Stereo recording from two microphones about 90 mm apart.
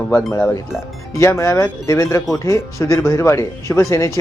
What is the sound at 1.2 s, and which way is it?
Speech, 35° left (ahead or behind).